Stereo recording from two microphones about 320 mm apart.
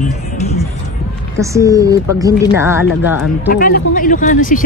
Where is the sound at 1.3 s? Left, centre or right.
Centre.